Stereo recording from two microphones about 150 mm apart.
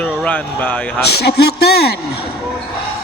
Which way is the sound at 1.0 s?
90° left.